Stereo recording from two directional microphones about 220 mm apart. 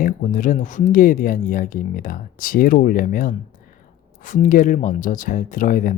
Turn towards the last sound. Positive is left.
turn(degrees=40)  # may be behind; listen again after turning